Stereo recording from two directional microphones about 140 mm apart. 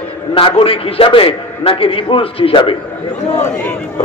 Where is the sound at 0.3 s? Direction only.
40° left (ahead or behind).